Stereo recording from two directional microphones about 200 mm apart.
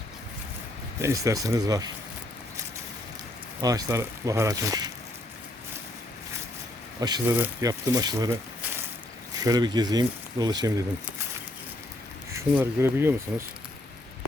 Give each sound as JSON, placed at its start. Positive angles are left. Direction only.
{"t": 0.9, "sound": "speech", "side_deg": -15}
{"t": 3.6, "sound": "speech", "side_deg": -20}
{"t": 7.0, "sound": "speech", "side_deg": -20}
{"t": 9.4, "sound": "speech", "side_deg": -20}
{"t": 12.3, "sound": "speech", "side_deg": -15}